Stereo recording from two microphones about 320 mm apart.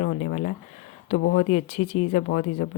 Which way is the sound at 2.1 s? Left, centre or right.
Left.